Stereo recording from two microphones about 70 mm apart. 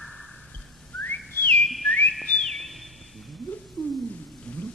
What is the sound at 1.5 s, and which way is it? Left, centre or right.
Whistling, centre.